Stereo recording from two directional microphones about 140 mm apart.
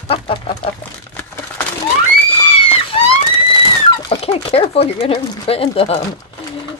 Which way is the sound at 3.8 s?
40° left (ahead or behind).